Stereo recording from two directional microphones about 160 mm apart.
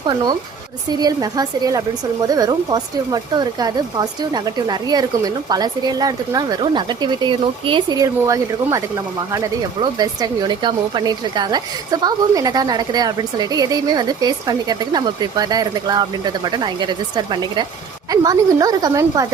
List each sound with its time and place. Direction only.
0.9 s speech: 25° right (ahead or behind)